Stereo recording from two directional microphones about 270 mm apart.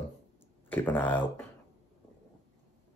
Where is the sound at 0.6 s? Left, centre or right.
Centre.